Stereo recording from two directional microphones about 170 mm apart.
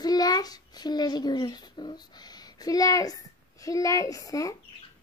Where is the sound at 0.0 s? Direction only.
20° left (ahead or behind).